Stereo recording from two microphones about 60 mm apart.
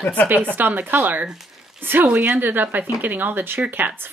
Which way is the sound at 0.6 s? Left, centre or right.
Right.